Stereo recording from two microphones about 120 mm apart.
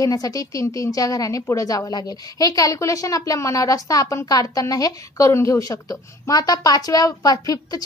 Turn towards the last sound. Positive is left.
turn(degrees=30)  # may be behind; listen again after turning